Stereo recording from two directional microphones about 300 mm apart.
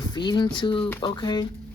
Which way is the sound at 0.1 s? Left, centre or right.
Centre.